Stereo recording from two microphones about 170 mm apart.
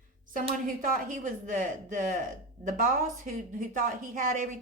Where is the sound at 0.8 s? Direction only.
50° right (ahead or behind).